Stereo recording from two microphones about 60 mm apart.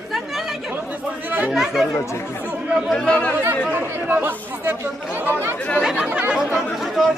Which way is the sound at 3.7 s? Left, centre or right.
Right.